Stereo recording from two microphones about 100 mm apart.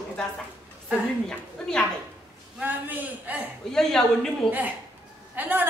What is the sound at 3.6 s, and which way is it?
Speech, 5° left (ahead or behind).